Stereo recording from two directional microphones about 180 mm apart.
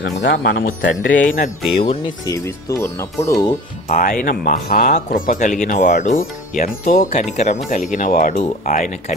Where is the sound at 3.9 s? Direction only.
45° left (ahead or behind).